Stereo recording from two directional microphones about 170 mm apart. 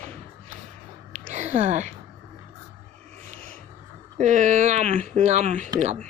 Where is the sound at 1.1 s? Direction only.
45° right (ahead or behind).